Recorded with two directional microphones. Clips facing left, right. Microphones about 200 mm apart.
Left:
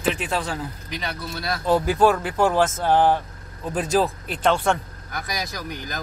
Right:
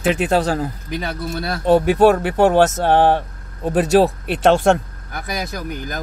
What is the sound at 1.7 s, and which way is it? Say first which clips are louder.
Speech: right 6 dB; 65° right (ahead or behind).